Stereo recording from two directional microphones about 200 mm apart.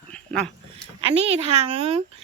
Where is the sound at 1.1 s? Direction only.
30° right (ahead or behind).